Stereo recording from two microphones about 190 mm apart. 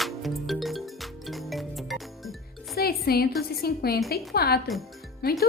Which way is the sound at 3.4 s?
55° left (ahead or behind).